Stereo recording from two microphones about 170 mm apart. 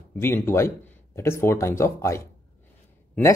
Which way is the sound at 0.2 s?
15° left (ahead or behind).